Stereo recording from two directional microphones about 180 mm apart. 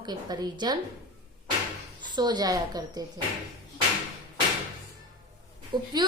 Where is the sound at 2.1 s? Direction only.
25° right (ahead or behind).